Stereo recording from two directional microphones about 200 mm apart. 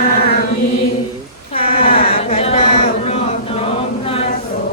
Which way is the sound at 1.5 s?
30° left (ahead or behind).